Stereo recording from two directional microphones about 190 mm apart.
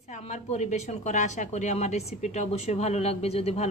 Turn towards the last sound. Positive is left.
turn(degrees=35)  # may be behind; listen again after turning